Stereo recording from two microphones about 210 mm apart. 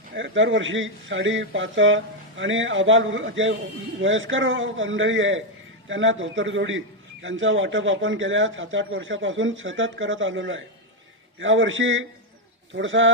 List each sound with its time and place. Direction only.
0.2 s a man's voice: 65° right (ahead or behind)